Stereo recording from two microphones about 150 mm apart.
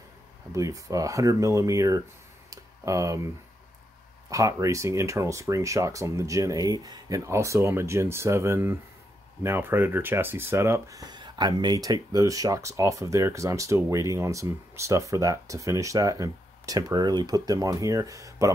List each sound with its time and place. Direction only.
0.5 s speech: 20° right (ahead or behind)
2.5 s a sound: 20° right (ahead or behind)
4.3 s speech: 20° right (ahead or behind)